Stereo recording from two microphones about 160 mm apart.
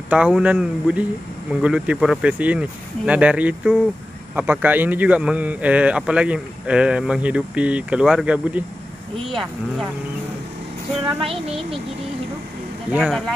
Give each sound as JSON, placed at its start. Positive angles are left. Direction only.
{"t": 0.1, "sound": "speech", "side_deg": -10}
{"t": 11.1, "sound": "speech", "side_deg": -35}